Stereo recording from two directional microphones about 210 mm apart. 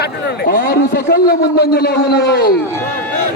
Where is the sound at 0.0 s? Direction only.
50° left (ahead or behind).